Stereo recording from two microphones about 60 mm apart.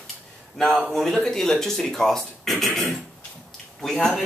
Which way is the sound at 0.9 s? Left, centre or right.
Centre.